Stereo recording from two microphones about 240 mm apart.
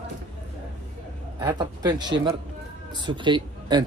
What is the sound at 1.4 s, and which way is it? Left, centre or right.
A man's voice, centre.